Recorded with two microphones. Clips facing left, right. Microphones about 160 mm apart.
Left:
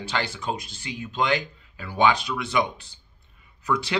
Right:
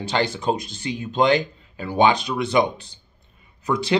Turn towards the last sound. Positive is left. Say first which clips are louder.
# right 5 dB
turn(degrees=-35)  # may be behind; listen again after turning